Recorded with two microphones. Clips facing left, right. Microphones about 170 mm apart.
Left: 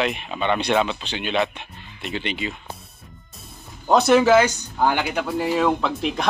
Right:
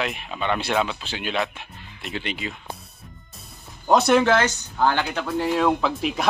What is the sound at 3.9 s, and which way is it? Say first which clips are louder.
Speech: left 2 dB; centre (ahead or behind).